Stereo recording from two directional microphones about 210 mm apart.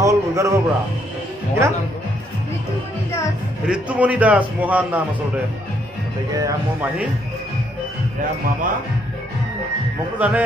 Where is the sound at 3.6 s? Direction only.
5° right (ahead or behind).